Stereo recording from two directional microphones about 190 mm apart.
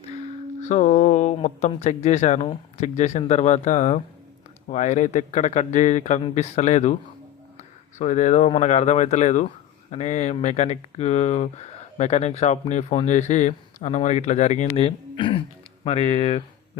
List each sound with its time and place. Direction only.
0.6 s speech: 40° left (ahead or behind)
7.9 s speech: 40° left (ahead or behind)